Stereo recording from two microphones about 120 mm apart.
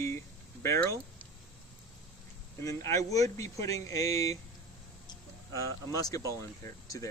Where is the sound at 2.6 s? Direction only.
25° left (ahead or behind).